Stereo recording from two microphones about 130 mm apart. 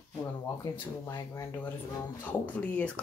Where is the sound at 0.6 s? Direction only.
25° left (ahead or behind).